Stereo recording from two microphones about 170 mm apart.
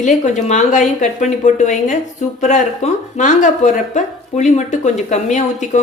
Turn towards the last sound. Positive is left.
turn(degrees=45)  # may be behind; listen again after turning